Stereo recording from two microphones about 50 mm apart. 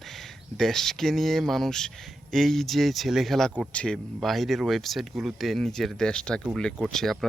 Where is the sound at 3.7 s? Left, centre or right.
Left.